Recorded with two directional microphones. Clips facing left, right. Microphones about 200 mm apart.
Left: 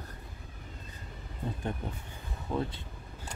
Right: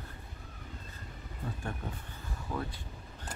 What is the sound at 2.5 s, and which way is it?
Speech, 25° left (ahead or behind).